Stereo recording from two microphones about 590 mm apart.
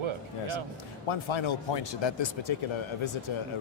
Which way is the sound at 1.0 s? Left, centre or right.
Left.